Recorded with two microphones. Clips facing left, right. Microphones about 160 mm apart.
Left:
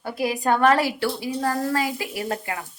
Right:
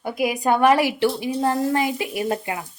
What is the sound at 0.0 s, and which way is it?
Speech, 15° right (ahead or behind).